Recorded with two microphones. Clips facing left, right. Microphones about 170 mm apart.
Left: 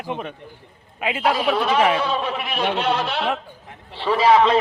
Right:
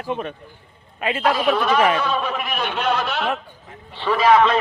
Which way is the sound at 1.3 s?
30° left (ahead or behind).